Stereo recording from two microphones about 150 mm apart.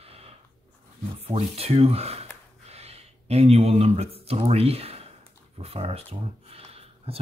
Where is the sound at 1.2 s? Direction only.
40° right (ahead or behind).